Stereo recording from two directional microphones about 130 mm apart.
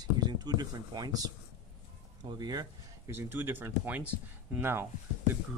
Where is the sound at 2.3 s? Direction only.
30° right (ahead or behind).